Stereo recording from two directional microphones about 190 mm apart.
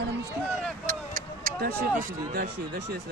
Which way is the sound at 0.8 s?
50° right (ahead or behind).